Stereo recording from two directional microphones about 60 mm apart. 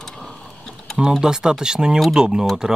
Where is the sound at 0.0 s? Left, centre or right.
Centre.